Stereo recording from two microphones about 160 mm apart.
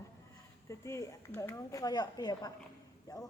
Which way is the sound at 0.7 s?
20° left (ahead or behind).